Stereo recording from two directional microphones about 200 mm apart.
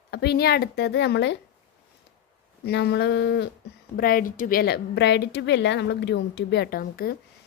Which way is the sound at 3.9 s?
45° left (ahead or behind).